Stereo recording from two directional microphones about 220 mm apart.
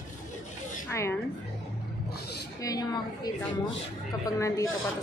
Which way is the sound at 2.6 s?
15° left (ahead or behind).